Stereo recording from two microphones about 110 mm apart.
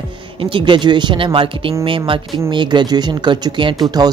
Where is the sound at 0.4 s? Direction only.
50° right (ahead or behind).